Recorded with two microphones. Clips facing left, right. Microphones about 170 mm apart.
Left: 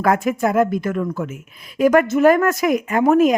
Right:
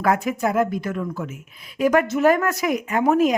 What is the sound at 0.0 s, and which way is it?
Speech, 50° left (ahead or behind).